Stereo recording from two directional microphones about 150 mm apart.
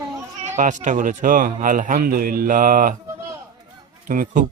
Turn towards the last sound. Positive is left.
turn(degrees=-65)  # may be behind; listen again after turning